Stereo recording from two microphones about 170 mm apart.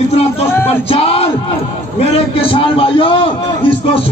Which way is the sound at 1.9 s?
35° left (ahead or behind).